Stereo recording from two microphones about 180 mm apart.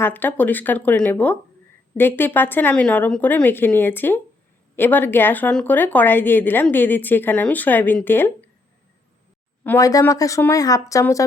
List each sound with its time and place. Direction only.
0.0 s a woman's voice: 10° left (ahead or behind)
9.6 s a woman's voice: 20° left (ahead or behind)